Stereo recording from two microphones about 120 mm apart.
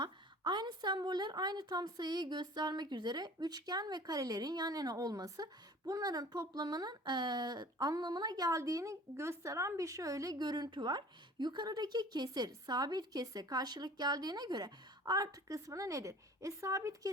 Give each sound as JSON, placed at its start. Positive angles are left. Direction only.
{"t": 0.0, "sound": "a woman's voice", "side_deg": -40}